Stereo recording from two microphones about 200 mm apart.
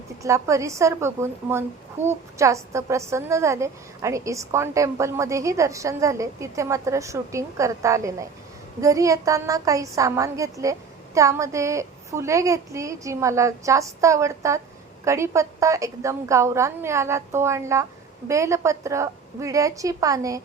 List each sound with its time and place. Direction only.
0.2 s a woman's voice: 15° right (ahead or behind)